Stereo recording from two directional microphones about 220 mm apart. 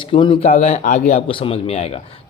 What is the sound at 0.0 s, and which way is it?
A man's voice, 20° left (ahead or behind).